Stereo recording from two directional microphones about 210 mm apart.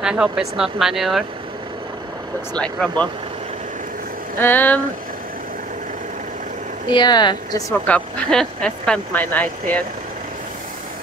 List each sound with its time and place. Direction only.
0.0 s speech: 5° right (ahead or behind)
2.5 s speech: 5° left (ahead or behind)
4.4 s speech: 10° left (ahead or behind)
6.9 s speech: 20° left (ahead or behind)
7.8 s speech: 5° left (ahead or behind)